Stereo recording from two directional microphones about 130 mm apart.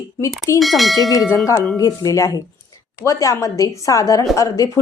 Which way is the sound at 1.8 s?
25° left (ahead or behind).